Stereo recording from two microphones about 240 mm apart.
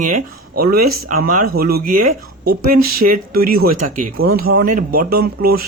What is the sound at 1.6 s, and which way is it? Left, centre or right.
Speech, right.